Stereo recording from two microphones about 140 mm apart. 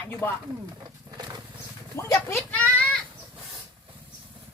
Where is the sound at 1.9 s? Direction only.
20° left (ahead or behind).